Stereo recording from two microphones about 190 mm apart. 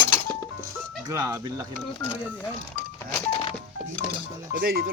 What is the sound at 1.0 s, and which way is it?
Speech, 15° right (ahead or behind).